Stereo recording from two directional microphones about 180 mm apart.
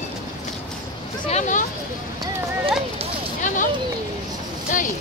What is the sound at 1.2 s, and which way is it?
Speech, 40° left (ahead or behind).